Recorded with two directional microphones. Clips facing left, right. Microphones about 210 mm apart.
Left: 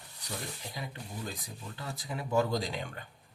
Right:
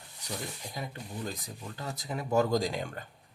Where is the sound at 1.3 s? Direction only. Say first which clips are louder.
Right 2 dB; 40° right (ahead or behind).